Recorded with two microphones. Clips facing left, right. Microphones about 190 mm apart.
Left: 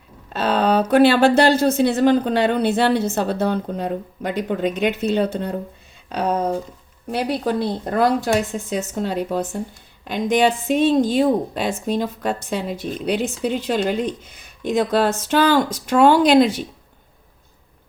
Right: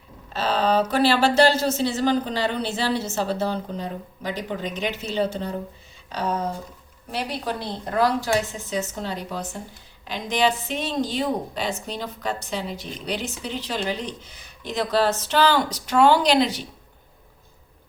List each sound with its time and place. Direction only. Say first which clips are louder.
0.3 s speech: left 3 dB; 55° left (ahead or behind)
7.1 s a woman's voice: left 7 dB; 55° left (ahead or behind)